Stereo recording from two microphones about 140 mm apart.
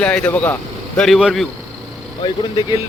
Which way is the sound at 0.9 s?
Centre (ahead or behind).